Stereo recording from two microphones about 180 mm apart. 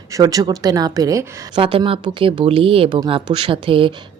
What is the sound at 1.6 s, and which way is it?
Speech, 30° right (ahead or behind).